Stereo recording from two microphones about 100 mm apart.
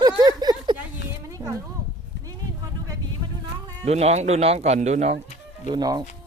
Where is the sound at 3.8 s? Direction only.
90° right.